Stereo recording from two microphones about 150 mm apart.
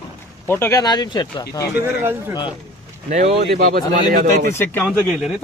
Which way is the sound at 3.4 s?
90° right.